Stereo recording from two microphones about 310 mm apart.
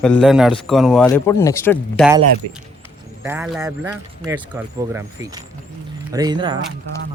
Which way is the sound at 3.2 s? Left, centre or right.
Centre.